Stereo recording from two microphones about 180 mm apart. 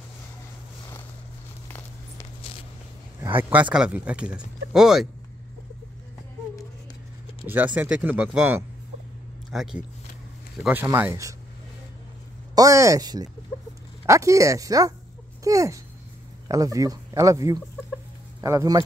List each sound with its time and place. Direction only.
3.4 s speech: 10° right (ahead or behind)
7.4 s speech: 10° right (ahead or behind)
12.5 s speech: 20° right (ahead or behind)